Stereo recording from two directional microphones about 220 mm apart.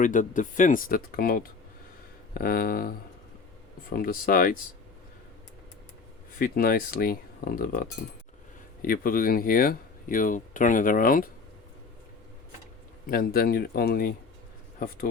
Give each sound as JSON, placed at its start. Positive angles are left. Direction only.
{"t": 0.0, "sound": "speech", "side_deg": 35}
{"t": 6.4, "sound": "speech", "side_deg": 40}
{"t": 13.1, "sound": "speech", "side_deg": 40}